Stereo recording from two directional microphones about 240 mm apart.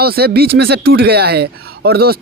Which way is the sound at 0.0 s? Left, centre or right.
Right.